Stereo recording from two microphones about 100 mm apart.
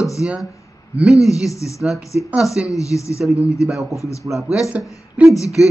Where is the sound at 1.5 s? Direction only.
30° left (ahead or behind).